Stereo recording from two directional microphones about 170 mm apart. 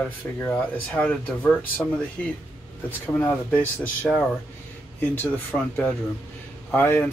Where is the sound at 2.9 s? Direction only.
10° left (ahead or behind).